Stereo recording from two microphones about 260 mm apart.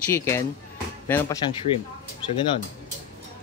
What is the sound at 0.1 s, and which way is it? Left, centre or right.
Speech, centre.